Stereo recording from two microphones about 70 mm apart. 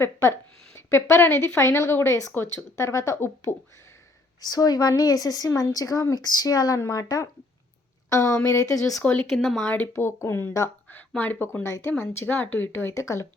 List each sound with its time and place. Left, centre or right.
0.0 s a woman's voice: left
3.2 s speech: left
4.4 s a woman's voice: left
6.1 s speech: left
9.3 s speech: centre
9.6 s speech: left
11.6 s speech: left
12.9 s speech: left